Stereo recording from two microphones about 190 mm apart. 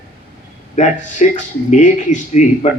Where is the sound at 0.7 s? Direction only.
40° left (ahead or behind).